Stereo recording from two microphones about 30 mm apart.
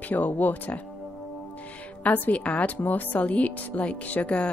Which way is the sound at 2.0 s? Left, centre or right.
Left.